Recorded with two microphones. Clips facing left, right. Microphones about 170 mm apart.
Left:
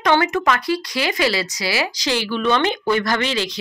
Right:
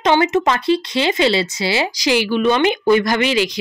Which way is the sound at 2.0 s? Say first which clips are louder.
Right 7 dB; 15° right (ahead or behind).